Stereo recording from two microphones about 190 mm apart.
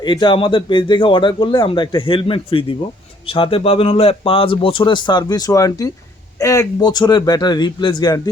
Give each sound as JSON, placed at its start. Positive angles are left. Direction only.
{"t": 0.0, "sound": "speech", "side_deg": 25}